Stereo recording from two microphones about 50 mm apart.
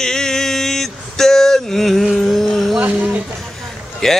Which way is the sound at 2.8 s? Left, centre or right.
Right.